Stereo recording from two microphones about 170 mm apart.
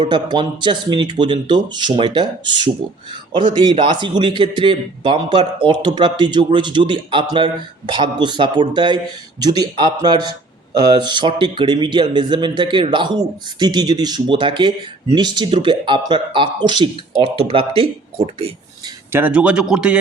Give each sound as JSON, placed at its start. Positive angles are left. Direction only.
{"t": 0.0, "sound": "a man's voice", "side_deg": -25}
{"t": 19.1, "sound": "a man's voice", "side_deg": -10}